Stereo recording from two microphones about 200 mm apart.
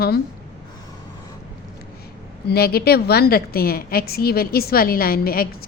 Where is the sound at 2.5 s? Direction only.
50° left (ahead or behind).